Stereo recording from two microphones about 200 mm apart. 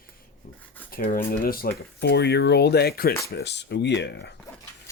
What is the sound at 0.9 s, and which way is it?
Speech, 45° left (ahead or behind).